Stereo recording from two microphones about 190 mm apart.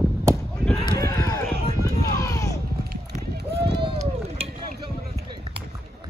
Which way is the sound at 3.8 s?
30° right (ahead or behind).